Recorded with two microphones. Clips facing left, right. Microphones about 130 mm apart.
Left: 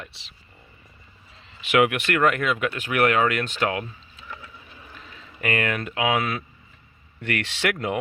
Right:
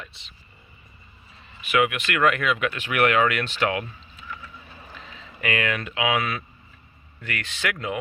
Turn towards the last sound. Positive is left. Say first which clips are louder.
# left 4 dB
turn(degrees=65)  # may be behind; listen again after turning